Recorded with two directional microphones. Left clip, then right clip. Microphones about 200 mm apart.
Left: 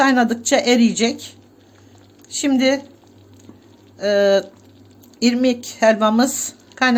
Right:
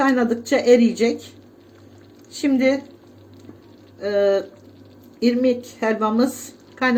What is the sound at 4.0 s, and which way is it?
Speech, 45° left (ahead or behind).